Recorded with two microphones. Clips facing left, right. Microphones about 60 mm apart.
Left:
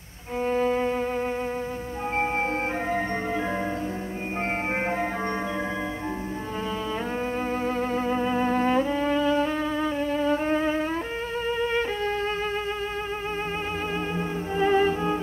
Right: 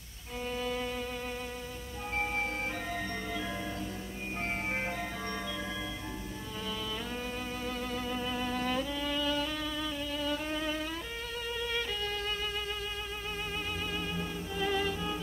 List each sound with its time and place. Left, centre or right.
0.5 s violin: left
7.6 s music: left
14.1 s music: left